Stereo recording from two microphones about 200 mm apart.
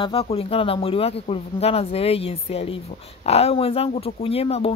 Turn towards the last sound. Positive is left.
turn(degrees=30)  # may be behind; listen again after turning